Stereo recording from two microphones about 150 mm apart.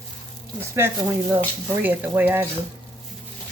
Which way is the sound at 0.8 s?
15° right (ahead or behind).